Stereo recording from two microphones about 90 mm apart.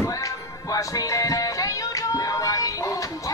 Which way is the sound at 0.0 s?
40° left (ahead or behind).